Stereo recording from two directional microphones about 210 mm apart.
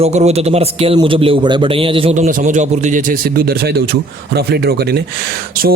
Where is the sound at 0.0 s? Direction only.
30° right (ahead or behind).